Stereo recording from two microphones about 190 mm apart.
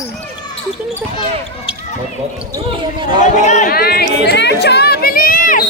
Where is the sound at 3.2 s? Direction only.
40° left (ahead or behind).